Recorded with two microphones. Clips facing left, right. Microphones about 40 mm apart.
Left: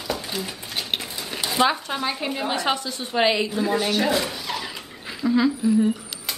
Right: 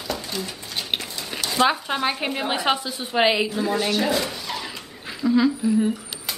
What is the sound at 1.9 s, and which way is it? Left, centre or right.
A woman's voice, right.